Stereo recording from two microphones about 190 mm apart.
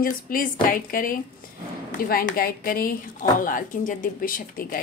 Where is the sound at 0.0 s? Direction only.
50° left (ahead or behind).